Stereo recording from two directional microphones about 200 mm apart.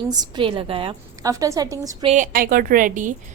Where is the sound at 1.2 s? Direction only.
15° right (ahead or behind).